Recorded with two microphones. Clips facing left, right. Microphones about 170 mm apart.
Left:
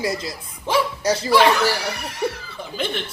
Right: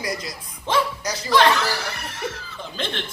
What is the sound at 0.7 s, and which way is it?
Speech, 10° left (ahead or behind).